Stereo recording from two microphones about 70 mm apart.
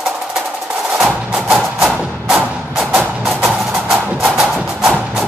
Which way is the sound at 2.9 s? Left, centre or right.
Centre.